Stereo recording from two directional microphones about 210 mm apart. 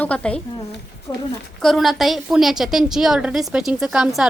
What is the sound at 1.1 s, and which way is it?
Speech, 15° left (ahead or behind).